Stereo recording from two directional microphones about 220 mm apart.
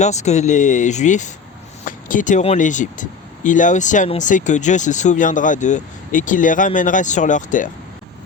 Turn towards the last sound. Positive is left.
turn(degrees=35)  # may be behind; listen again after turning